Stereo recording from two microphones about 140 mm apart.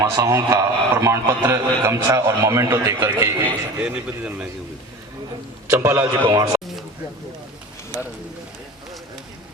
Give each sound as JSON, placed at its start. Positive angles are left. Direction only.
{"t": 0.0, "sound": "a man's voice", "side_deg": -20}
{"t": 3.8, "sound": "a man's voice", "side_deg": -10}
{"t": 5.7, "sound": "a man's voice", "side_deg": -20}